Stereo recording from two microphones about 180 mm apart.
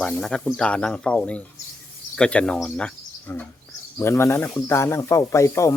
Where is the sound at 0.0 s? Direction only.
Centre (ahead or behind).